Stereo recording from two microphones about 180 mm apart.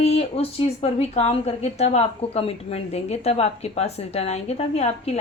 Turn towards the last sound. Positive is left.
turn(degrees=35)  # may be behind; listen again after turning